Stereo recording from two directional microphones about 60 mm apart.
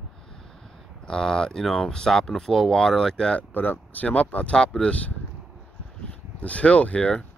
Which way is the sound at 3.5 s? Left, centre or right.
Left.